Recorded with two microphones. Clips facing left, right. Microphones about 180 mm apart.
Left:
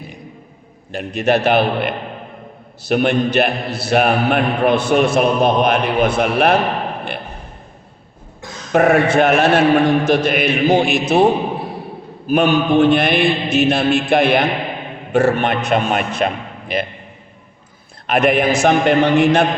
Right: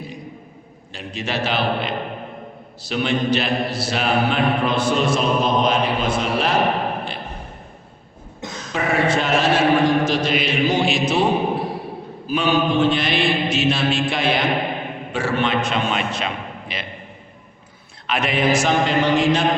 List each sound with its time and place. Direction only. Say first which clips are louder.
0.9 s a man's voice: left 9 dB; 60° left (ahead or behind)
8.7 s a man's voice: left 7 dB; 60° left (ahead or behind)
12.3 s a man's voice: left 5 dB; 60° left (ahead or behind)
18.0 s a man's voice: left 6 dB; 55° left (ahead or behind)